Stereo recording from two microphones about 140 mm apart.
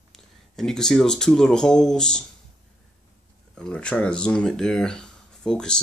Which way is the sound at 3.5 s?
5° left (ahead or behind).